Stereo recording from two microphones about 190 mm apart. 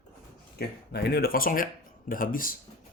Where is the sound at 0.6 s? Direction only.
60° left (ahead or behind).